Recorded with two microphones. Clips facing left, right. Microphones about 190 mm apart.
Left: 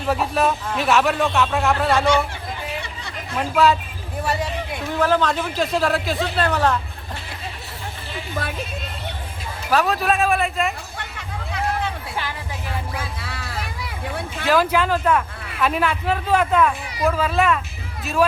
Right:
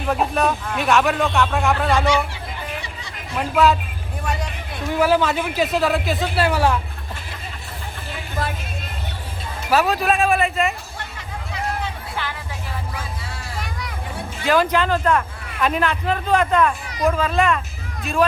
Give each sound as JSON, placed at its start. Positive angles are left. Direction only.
{"t": 0.3, "sound": "speech", "side_deg": 0}
{"t": 3.3, "sound": "speech", "side_deg": 0}
{"t": 4.9, "sound": "speech", "side_deg": -10}
{"t": 9.6, "sound": "speech", "side_deg": 0}
{"t": 13.2, "sound": "a sound", "side_deg": 70}
{"t": 14.4, "sound": "speech", "side_deg": 5}